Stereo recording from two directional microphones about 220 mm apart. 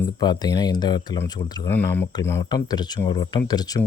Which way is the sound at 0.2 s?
20° left (ahead or behind).